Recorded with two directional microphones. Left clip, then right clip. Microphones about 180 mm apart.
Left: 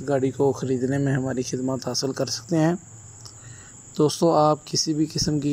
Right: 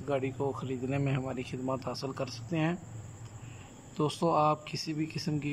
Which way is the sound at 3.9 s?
20° left (ahead or behind).